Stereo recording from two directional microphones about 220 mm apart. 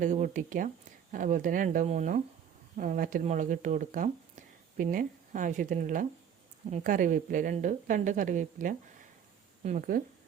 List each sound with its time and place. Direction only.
0.0 s a woman's voice: 35° right (ahead or behind)